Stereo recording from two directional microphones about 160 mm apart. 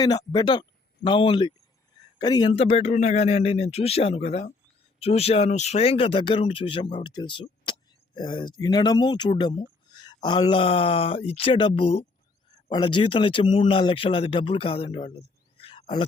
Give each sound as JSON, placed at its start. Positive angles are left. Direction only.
{"t": 0.0, "sound": "a man's voice", "side_deg": 25}
{"t": 2.5, "sound": "speech", "side_deg": 40}